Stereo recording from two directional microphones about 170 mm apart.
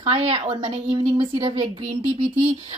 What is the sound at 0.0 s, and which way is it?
A woman's voice, 35° right (ahead or behind).